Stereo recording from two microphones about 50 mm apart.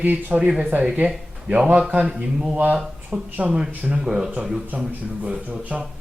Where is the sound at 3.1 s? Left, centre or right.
Right.